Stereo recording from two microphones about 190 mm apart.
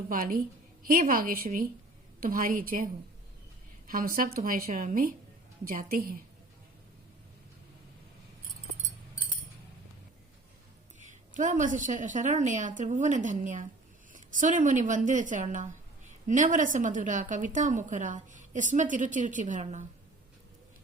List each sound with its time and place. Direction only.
0.1 s a woman's voice: 50° right (ahead or behind)
3.8 s a woman's voice: 50° right (ahead or behind)
11.0 s a woman's voice: 40° right (ahead or behind)